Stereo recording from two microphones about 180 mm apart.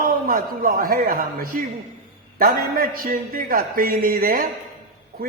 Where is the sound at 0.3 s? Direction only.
55° right (ahead or behind).